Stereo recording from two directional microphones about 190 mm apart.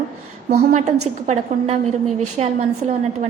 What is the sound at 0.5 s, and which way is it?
A woman's voice, 35° right (ahead or behind).